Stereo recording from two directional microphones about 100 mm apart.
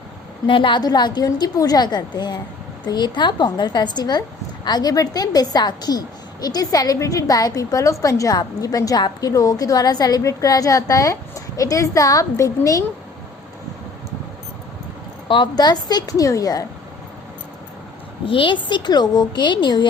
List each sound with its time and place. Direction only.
0.4 s a woman's voice: 55° left (ahead or behind); by 12.8 s 35° left (ahead or behind)
15.3 s a woman's voice: 50° left (ahead or behind)
18.3 s a woman's voice: 55° left (ahead or behind)